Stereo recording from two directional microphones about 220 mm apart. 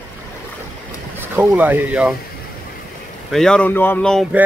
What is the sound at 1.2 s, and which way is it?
Speech, 10° right (ahead or behind).